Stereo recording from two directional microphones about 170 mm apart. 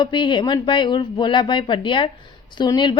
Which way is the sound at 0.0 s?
25° left (ahead or behind).